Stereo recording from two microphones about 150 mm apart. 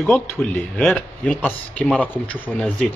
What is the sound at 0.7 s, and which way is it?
A man's voice, 10° left (ahead or behind).